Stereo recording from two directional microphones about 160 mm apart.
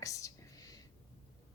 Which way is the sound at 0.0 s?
20° left (ahead or behind).